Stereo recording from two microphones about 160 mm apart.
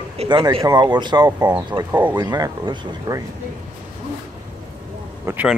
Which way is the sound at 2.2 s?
25° right (ahead or behind).